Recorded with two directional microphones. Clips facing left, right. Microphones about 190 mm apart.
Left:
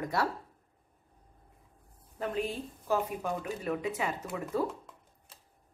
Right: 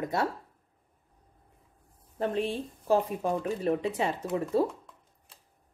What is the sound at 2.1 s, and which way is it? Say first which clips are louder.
Speech: right 4 dB; 30° right (ahead or behind).